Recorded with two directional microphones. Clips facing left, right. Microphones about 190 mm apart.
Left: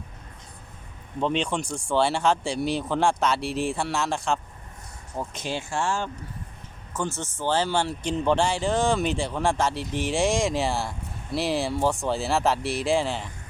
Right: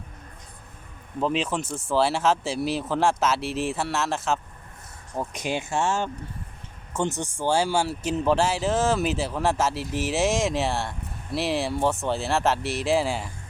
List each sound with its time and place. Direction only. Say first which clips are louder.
1.2 s speech: even; 5° right (ahead or behind)
5.1 s speech: right 2 dB; 15° right (ahead or behind)